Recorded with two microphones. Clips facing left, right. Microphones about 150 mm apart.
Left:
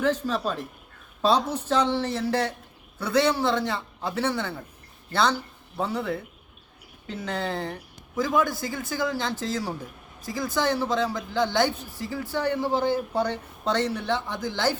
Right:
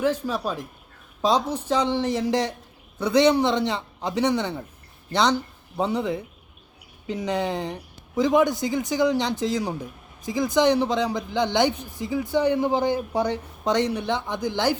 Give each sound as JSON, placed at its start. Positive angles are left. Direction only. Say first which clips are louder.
{"t": 0.0, "sound": "speech", "louder": "right 1 dB", "side_deg": -10}